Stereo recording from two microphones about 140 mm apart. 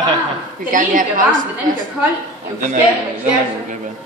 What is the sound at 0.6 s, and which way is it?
Speech, 75° right (ahead or behind).